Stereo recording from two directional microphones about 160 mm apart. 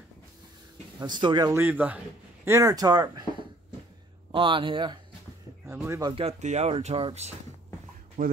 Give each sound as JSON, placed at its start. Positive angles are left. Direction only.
{"t": 0.9, "sound": "speech", "side_deg": -25}
{"t": 1.5, "sound": "speech", "side_deg": -10}
{"t": 6.1, "sound": "speech", "side_deg": -40}
{"t": 8.2, "sound": "speech", "side_deg": -60}